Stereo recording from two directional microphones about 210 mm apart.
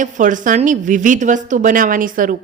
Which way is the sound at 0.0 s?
40° right (ahead or behind).